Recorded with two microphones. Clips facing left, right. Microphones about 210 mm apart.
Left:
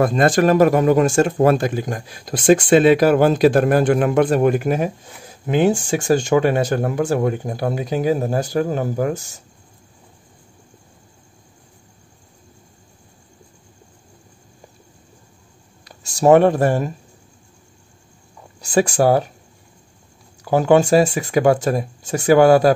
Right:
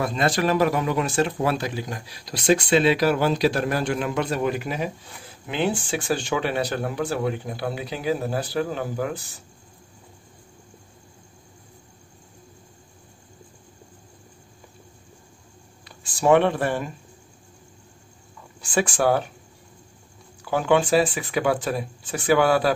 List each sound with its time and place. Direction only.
0.0 s speech: 50° left (ahead or behind)
15.8 s speech: 40° left (ahead or behind)
18.6 s speech: 40° left (ahead or behind)
20.4 s speech: 40° left (ahead or behind)